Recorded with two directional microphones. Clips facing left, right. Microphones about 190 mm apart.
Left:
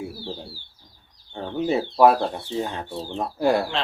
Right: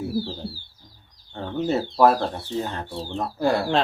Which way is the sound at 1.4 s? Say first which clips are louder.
Left 1 dB; 10° left (ahead or behind).